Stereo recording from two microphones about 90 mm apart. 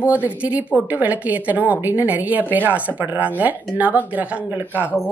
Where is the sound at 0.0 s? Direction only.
15° right (ahead or behind).